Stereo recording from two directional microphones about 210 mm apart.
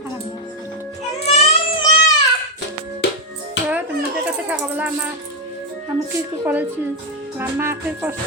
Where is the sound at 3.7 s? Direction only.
5° right (ahead or behind).